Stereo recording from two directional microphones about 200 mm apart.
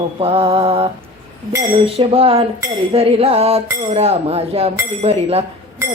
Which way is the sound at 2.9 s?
30° right (ahead or behind).